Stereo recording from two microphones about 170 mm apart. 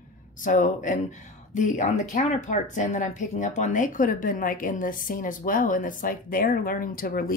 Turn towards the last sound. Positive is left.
turn(degrees=60)  # may be behind; listen again after turning